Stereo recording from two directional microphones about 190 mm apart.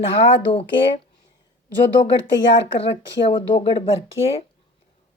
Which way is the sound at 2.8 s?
30° left (ahead or behind).